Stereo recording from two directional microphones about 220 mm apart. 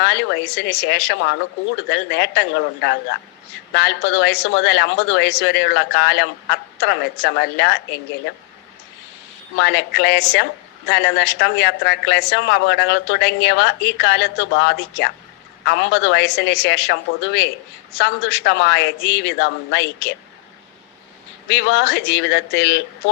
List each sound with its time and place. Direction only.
0.0 s speech: 50° left (ahead or behind)
9.6 s speech: 50° left (ahead or behind)
21.4 s speech: 50° left (ahead or behind)